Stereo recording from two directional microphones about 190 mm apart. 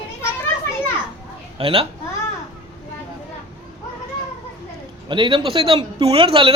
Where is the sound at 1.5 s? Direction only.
30° right (ahead or behind).